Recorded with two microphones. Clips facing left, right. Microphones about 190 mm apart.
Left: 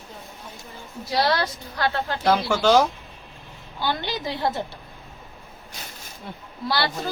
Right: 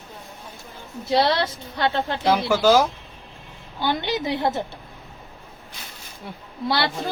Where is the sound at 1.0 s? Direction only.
25° right (ahead or behind).